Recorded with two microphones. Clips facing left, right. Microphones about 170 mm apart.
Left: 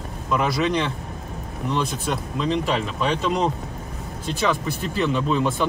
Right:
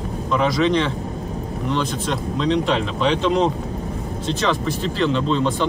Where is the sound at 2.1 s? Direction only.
5° left (ahead or behind).